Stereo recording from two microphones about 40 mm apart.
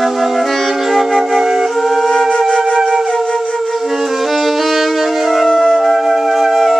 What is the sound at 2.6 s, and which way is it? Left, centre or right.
Flute, centre.